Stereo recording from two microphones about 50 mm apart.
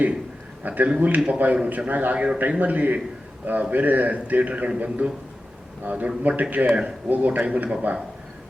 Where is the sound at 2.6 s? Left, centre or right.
Right.